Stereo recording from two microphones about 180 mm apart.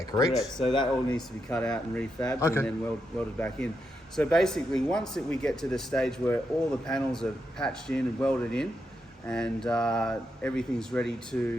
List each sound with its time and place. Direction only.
0.3 s speech: centre (ahead or behind)
0.7 s speech: 25° left (ahead or behind)
1.5 s speech: 5° left (ahead or behind)